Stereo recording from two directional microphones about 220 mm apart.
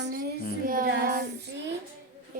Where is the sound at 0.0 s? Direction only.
45° right (ahead or behind).